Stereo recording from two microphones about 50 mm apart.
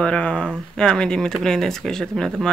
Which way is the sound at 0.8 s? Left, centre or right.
Centre.